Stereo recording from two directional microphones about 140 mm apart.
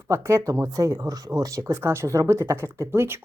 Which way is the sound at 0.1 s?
20° right (ahead or behind).